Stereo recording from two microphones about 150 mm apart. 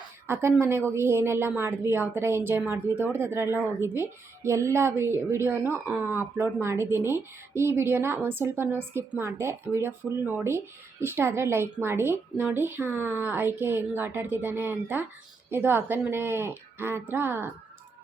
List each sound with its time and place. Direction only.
0.3 s a woman's voice: 15° right (ahead or behind)